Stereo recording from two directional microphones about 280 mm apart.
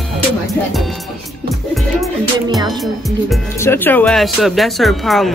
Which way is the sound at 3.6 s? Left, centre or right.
Centre.